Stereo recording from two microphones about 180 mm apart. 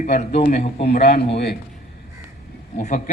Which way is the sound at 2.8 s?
45° left (ahead or behind).